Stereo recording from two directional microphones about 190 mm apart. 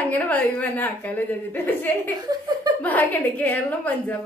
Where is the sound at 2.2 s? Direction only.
20° right (ahead or behind).